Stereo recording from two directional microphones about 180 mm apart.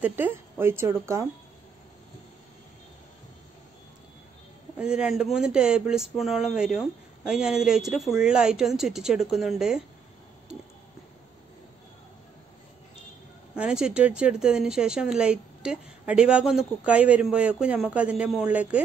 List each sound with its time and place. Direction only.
0.0 s speech: 10° right (ahead or behind)
4.7 s speech: 5° right (ahead or behind)
13.6 s speech: 5° right (ahead or behind)